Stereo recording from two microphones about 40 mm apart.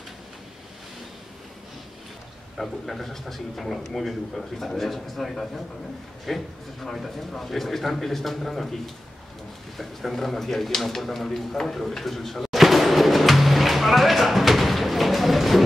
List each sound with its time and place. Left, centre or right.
2.5 s a man's voice: centre
11.7 s music: centre